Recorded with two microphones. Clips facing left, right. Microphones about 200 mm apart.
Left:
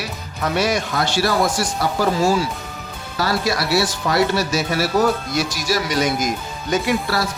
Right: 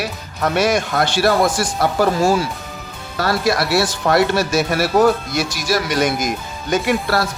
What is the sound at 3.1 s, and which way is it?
Speech, 55° right (ahead or behind).